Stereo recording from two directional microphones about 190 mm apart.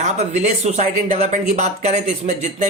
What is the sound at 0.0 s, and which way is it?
Speech, 35° right (ahead or behind).